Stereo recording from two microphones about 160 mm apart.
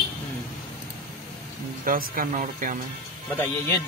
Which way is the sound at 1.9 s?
60° right (ahead or behind).